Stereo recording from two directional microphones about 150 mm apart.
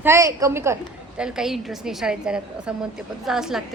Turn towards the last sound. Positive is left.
turn(degrees=-5)  # may be behind; listen again after turning